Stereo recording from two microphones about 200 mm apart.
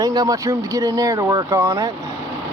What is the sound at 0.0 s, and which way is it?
Speech, 20° right (ahead or behind).